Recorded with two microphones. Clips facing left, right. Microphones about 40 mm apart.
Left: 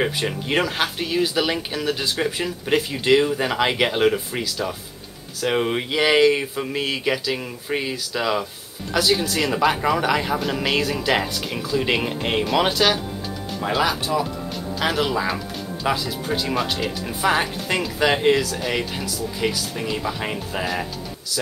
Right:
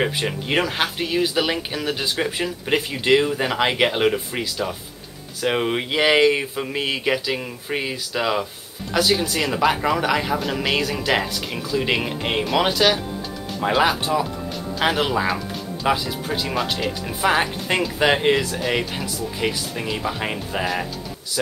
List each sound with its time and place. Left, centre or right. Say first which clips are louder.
0.0 s speech: even; centre
13.6 s speech: right 3 dB; centre
13.8 s speech: right 2 dB; right
15.2 s music: right 2 dB; centre
15.9 s speech: right 1 dB; centre
18.6 s speech: right 1 dB; centre